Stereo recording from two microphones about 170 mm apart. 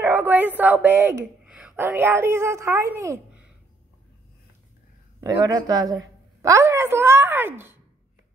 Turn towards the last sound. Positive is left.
turn(degrees=-15)  # may be behind; listen again after turning